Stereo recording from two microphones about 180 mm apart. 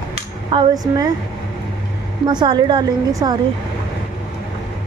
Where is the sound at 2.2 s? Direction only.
25° right (ahead or behind).